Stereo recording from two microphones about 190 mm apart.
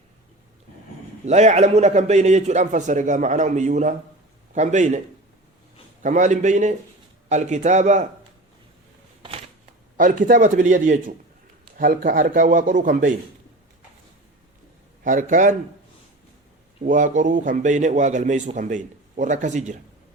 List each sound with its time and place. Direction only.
1.2 s a man's voice: 35° right (ahead or behind)
6.0 s a man's voice: 40° right (ahead or behind)
10.0 s speech: 45° right (ahead or behind)
15.0 s speech: 40° right (ahead or behind)
16.8 s a man's voice: 45° right (ahead or behind)